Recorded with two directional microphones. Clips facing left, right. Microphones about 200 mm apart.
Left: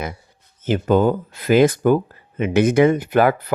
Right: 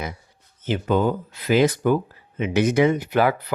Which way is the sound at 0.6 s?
45° left (ahead or behind).